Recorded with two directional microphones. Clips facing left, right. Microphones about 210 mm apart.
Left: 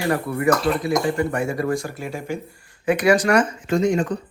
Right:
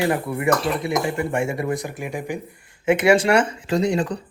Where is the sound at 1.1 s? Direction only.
25° right (ahead or behind).